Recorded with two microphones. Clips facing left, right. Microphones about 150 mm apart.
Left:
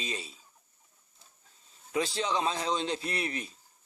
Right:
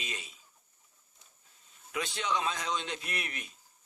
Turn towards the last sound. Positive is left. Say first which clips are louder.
# left 6 dB
turn(degrees=30)  # may be behind; listen again after turning